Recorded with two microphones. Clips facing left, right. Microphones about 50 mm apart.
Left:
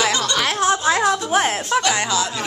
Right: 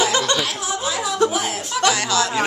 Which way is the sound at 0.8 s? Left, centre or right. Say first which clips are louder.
Left 6 dB; left.